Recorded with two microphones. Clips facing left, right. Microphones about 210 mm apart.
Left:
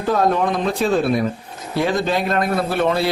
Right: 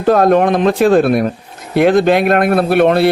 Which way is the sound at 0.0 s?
70° right (ahead or behind).